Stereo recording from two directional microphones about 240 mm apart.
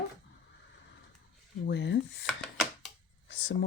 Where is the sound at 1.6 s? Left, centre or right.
Left.